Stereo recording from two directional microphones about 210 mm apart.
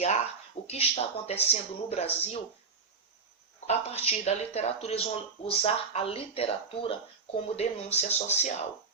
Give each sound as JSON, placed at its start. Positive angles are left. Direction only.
{"t": 0.7, "sound": "speech", "side_deg": 30}
{"t": 3.7, "sound": "speech", "side_deg": 30}